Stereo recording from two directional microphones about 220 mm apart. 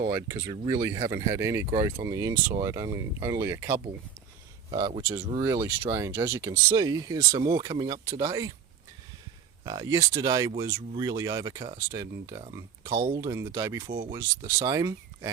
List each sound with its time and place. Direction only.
0.1 s speech: 10° right (ahead or behind)
4.7 s speech: 25° right (ahead or behind)
5.4 s speech: 15° right (ahead or behind)
9.6 s speech: 15° right (ahead or behind)